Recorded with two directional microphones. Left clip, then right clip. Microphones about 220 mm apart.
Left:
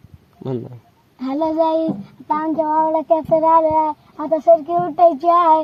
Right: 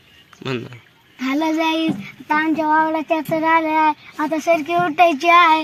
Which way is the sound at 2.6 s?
5° right (ahead or behind).